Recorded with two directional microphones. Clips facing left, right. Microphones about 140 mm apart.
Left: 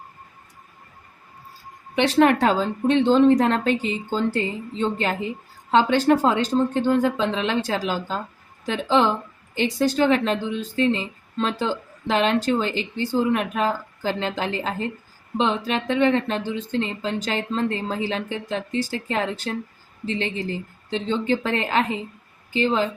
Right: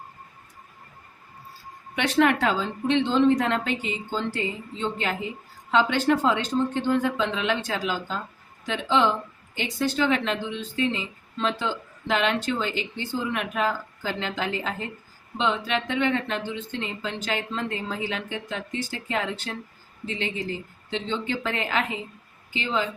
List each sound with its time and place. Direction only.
2.0 s a woman's voice: 30° left (ahead or behind)
20.9 s a woman's voice: 40° left (ahead or behind)